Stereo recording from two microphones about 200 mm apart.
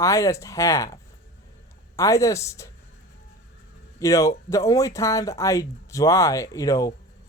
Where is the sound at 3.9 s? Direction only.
15° left (ahead or behind).